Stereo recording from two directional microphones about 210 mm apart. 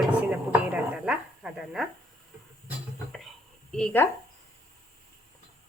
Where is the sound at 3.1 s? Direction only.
5° left (ahead or behind).